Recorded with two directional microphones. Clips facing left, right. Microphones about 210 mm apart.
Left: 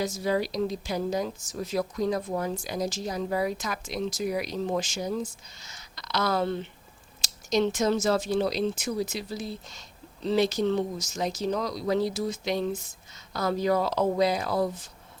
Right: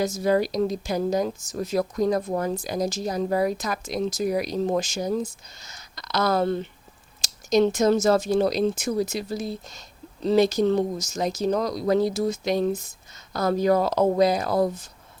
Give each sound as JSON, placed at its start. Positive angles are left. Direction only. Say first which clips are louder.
{"t": 0.0, "sound": "speech", "louder": "right 5 dB", "side_deg": -45}